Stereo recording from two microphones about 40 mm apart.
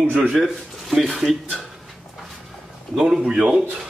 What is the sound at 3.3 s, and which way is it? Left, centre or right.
Speech, centre.